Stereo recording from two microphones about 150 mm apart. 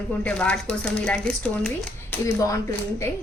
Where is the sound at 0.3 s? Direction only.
10° left (ahead or behind).